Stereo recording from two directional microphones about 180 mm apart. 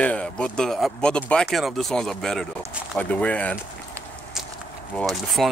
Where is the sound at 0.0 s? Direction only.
5° left (ahead or behind).